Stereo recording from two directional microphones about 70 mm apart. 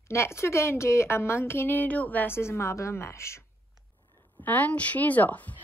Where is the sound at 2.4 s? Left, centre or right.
Left.